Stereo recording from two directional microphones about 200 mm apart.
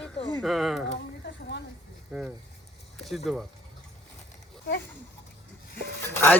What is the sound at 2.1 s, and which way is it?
Speech, 5° right (ahead or behind).